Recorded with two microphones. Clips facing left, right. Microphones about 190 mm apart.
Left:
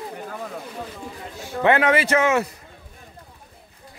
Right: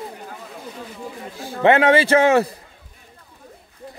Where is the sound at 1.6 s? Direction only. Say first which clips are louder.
Right 4 dB; 25° right (ahead or behind).